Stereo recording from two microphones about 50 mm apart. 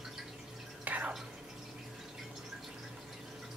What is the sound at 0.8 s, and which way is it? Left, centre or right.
Drip, right.